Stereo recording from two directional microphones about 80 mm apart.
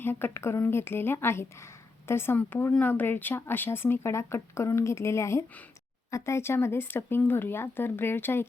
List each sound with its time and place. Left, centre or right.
0.0 s speech: left